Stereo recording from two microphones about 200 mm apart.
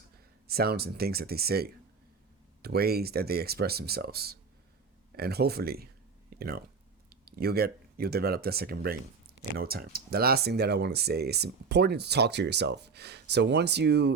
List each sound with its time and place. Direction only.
0.4 s speech: 50° right (ahead or behind)